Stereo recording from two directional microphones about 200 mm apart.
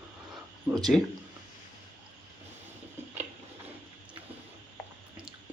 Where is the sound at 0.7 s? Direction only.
5° right (ahead or behind).